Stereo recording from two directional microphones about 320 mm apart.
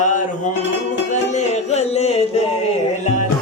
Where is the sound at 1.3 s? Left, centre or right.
Left.